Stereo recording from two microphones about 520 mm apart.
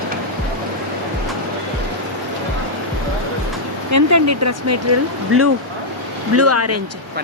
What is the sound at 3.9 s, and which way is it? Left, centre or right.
Speech, right.